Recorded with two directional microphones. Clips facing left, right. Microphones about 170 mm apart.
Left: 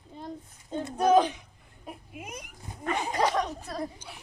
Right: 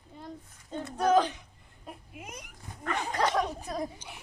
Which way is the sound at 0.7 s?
15° left (ahead or behind).